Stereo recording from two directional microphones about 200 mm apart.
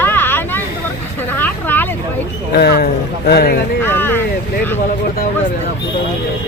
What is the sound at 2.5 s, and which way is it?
A man's voice, 50° left (ahead or behind).